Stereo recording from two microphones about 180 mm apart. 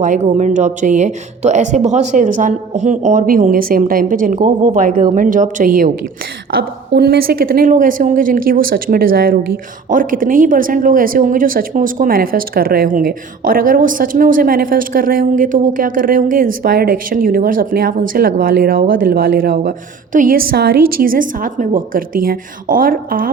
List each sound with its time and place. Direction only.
0.0 s a woman's voice: 45° right (ahead or behind)
6.6 s a woman's voice: 60° right (ahead or behind)